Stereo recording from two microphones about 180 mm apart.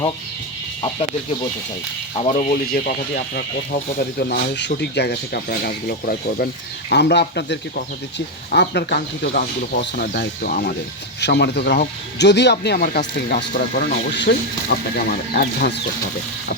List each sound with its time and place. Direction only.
2.1 s speech: 40° left (ahead or behind)
6.9 s speech: 70° left (ahead or behind)
9.0 s speech: 55° left (ahead or behind)
11.2 s speech: 70° left (ahead or behind)